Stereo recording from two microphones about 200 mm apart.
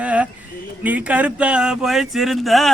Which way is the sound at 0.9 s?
5° right (ahead or behind).